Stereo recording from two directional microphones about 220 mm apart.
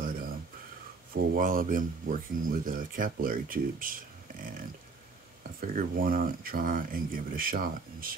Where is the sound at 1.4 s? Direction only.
40° right (ahead or behind).